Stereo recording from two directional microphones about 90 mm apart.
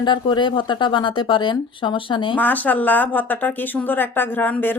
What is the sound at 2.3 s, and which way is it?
Speech, 20° left (ahead or behind).